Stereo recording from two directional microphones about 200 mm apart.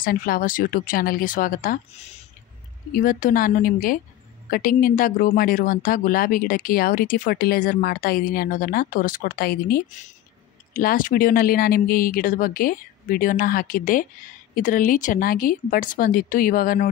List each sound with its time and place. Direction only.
0.0 s a woman's voice: 45° left (ahead or behind)